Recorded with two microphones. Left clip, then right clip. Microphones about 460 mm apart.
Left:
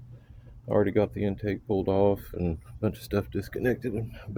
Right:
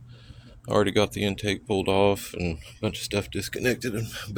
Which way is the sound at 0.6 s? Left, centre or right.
Left.